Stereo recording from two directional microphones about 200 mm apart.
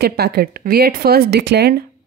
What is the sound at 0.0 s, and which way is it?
A woman's voice, 55° right (ahead or behind).